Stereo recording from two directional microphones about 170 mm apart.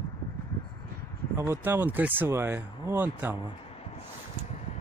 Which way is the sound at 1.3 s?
15° right (ahead or behind).